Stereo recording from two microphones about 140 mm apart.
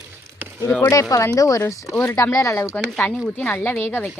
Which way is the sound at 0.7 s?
10° left (ahead or behind).